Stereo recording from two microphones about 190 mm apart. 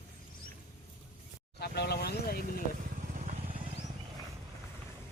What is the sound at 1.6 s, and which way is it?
Vehicle, 60° left (ahead or behind).